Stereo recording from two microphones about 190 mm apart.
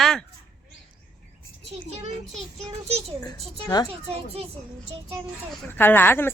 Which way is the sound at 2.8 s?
35° right (ahead or behind).